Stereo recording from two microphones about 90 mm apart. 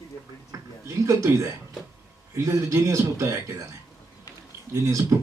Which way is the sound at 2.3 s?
35° right (ahead or behind).